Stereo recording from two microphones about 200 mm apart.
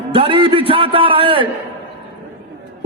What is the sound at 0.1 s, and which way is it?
A man's voice, 25° right (ahead or behind).